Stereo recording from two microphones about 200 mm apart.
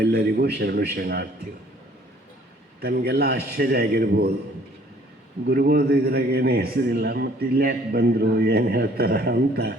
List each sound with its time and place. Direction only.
0.0 s a man's voice: 55° right (ahead or behind)
2.8 s a man's voice: 50° right (ahead or behind)
5.5 s a man's voice: 50° right (ahead or behind)